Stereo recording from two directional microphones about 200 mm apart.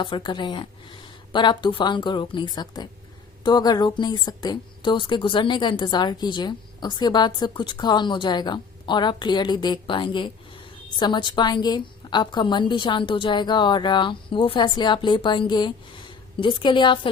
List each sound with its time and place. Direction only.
0.0 s a woman's voice: 25° left (ahead or behind)